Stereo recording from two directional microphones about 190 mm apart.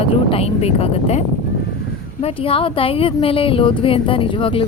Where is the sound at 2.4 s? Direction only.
30° left (ahead or behind).